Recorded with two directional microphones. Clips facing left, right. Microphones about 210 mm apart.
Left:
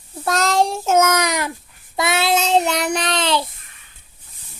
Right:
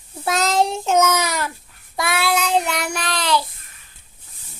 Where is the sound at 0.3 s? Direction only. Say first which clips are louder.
Left 1 dB; centre (ahead or behind); by 3.5 s 25° left (ahead or behind).